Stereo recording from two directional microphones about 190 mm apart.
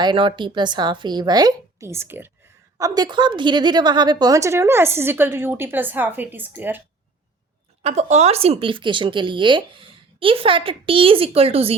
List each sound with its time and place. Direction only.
0.0 s a woman's voice: 25° right (ahead or behind); by 6.8 s 10° right (ahead or behind)
7.8 s speech: 40° right (ahead or behind)